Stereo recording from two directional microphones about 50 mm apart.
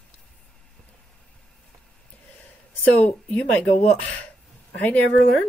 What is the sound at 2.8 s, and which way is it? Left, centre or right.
Speech, left.